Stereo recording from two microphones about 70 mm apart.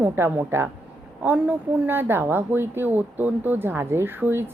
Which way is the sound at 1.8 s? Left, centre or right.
Right.